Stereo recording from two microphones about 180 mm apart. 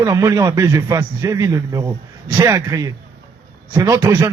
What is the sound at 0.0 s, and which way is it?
A man's voice, 15° right (ahead or behind).